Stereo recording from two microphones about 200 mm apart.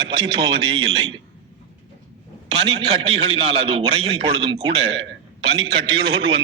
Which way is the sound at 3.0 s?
30° right (ahead or behind).